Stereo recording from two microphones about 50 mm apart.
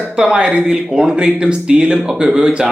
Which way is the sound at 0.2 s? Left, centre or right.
Centre.